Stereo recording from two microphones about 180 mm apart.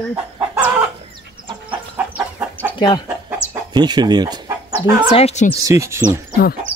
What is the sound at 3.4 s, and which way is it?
Chicken, 10° left (ahead or behind).